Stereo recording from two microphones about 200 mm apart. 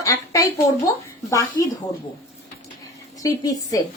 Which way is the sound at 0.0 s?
15° left (ahead or behind).